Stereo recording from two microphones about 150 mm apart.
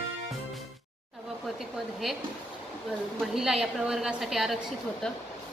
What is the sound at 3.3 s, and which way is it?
A woman's voice, centre (ahead or behind).